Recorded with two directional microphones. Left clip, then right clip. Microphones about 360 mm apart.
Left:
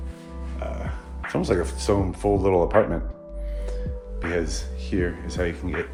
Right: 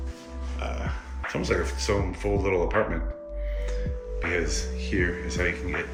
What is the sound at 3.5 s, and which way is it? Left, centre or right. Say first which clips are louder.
Music: left 1 dB; centre.